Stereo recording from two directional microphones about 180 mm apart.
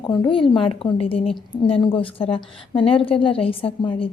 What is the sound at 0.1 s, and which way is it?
A woman's voice, 25° left (ahead or behind).